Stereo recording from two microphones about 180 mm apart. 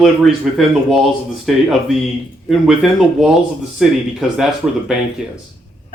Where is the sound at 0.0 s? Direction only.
Centre (ahead or behind).